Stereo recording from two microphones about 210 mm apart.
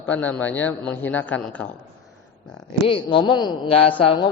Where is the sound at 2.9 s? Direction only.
20° left (ahead or behind).